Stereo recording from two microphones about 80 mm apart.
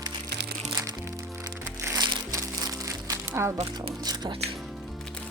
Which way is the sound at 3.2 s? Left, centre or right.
Right.